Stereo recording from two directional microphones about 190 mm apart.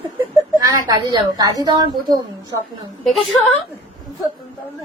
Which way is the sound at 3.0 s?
Centre (ahead or behind).